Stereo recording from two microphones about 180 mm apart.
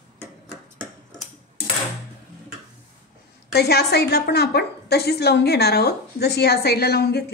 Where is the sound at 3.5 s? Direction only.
65° left (ahead or behind).